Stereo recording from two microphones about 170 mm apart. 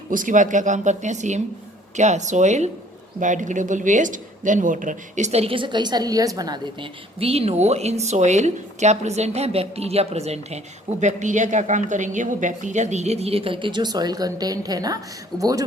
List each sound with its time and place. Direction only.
0.1 s speech: 50° right (ahead or behind); by 15.6 s 20° right (ahead or behind)